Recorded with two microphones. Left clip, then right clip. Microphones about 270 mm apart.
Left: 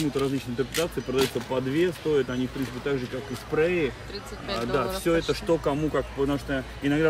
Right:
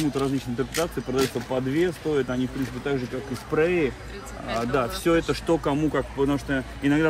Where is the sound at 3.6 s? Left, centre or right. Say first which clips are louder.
Right 2 dB; centre.